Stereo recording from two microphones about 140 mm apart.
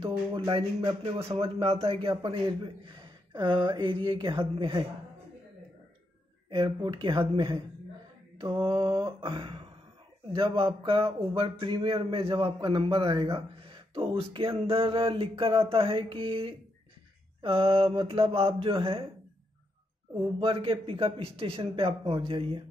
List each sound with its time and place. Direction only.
0.0 s a man's voice: 40° right (ahead or behind)
6.5 s a man's voice: 40° right (ahead or behind)
20.3 s a man's voice: 40° right (ahead or behind)